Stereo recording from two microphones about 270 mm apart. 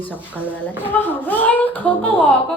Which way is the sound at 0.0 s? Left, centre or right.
Centre.